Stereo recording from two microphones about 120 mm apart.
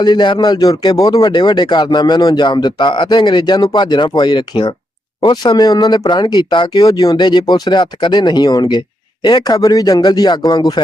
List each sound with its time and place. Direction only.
0.0 s speech: 40° left (ahead or behind)